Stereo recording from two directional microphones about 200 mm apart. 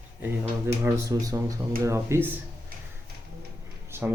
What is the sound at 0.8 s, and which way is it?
Speech, 15° right (ahead or behind).